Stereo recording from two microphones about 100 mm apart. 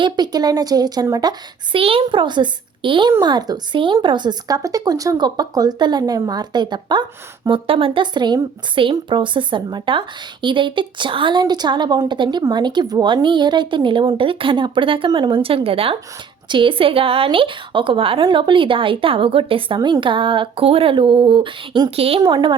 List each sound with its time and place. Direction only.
0.0 s a woman's voice: 45° right (ahead or behind)
1.7 s a woman's voice: 65° right (ahead or behind)
3.2 s a woman's voice: 45° right (ahead or behind)
7.4 s a woman's voice: 60° right (ahead or behind)
16.5 s a woman's voice: 55° right (ahead or behind)
21.9 s a woman's voice: 80° right
22.2 s a woman's voice: 50° right (ahead or behind)